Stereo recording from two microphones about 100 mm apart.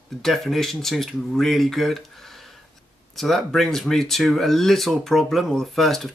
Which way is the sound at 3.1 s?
Centre (ahead or behind).